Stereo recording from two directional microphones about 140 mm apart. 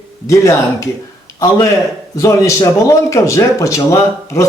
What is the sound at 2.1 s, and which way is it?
Speech, 25° left (ahead or behind).